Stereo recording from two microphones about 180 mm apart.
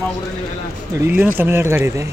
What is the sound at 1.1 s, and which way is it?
Speech, 10° right (ahead or behind).